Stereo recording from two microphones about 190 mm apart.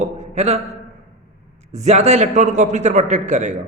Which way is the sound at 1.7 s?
35° right (ahead or behind).